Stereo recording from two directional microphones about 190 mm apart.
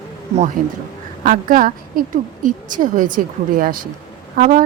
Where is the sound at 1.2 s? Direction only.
45° right (ahead or behind).